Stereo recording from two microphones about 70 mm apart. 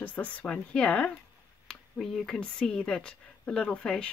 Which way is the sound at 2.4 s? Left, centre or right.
Centre.